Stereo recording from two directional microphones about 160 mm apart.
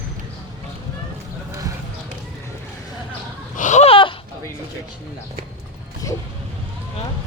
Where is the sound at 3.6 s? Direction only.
50° left (ahead or behind).